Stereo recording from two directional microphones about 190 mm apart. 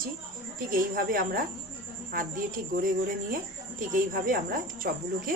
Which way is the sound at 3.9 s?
45° right (ahead or behind).